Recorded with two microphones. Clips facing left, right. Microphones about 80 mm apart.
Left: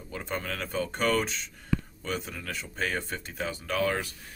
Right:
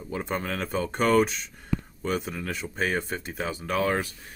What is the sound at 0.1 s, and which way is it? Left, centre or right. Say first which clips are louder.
Speech: right 4 dB; right.